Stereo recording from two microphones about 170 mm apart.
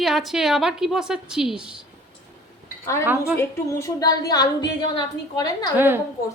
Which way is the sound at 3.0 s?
10° right (ahead or behind).